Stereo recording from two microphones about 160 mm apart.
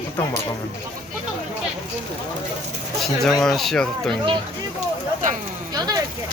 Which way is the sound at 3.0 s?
Centre (ahead or behind).